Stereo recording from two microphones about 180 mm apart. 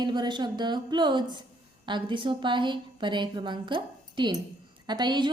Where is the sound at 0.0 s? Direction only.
25° right (ahead or behind).